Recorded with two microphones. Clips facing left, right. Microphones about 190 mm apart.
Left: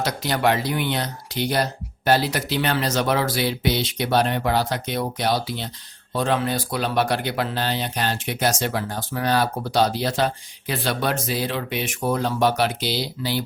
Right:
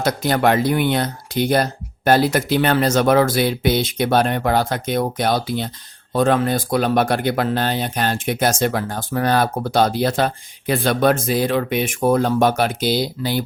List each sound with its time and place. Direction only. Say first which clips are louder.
0.0 s speech: right 4 dB; 50° right (ahead or behind)